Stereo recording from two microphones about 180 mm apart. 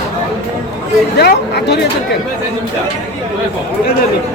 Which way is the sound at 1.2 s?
65° left (ahead or behind).